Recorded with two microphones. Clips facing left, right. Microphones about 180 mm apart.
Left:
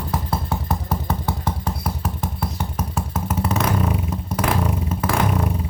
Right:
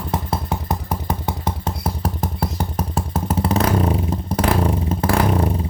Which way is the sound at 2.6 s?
30° right (ahead or behind).